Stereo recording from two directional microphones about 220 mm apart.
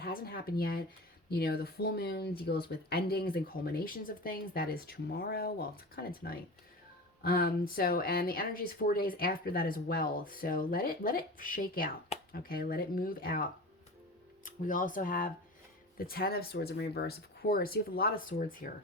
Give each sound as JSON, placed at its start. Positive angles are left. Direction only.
{"t": 0.0, "sound": "speech", "side_deg": 45}